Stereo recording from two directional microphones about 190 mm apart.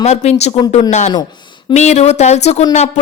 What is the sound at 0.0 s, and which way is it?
A woman's voice, 35° left (ahead or behind).